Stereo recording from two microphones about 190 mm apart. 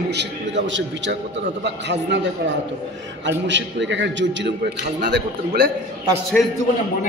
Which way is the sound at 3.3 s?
70° right (ahead or behind).